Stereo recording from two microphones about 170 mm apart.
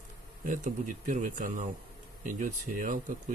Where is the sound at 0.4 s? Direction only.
50° right (ahead or behind).